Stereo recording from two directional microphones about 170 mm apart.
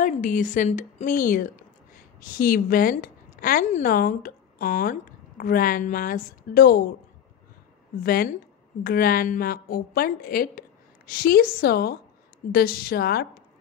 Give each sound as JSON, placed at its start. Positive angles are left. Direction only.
{"t": 0.0, "sound": "a woman's voice", "side_deg": 50}
{"t": 8.0, "sound": "a woman's voice", "side_deg": 60}